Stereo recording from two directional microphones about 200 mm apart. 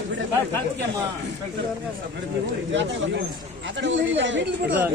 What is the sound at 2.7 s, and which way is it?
Speech, 65° right (ahead or behind).